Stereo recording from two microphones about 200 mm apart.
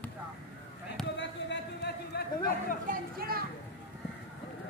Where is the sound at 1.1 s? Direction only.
60° left (ahead or behind).